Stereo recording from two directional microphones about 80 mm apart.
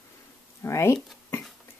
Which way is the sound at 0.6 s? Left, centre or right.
Left.